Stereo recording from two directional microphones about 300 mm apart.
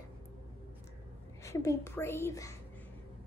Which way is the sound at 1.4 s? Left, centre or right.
Centre.